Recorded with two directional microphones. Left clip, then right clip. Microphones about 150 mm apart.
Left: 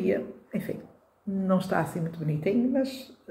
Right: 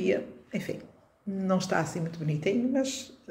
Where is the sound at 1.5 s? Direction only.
15° right (ahead or behind).